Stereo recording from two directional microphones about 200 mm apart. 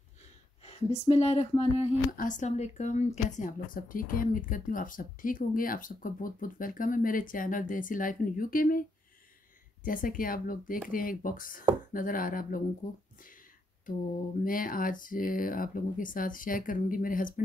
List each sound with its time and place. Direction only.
0.7 s speech: 30° left (ahead or behind)
9.8 s speech: 45° left (ahead or behind)
14.4 s speech: 45° left (ahead or behind)